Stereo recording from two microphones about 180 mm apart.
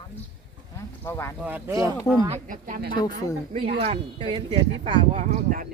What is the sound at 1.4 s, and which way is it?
Speech, 15° right (ahead or behind).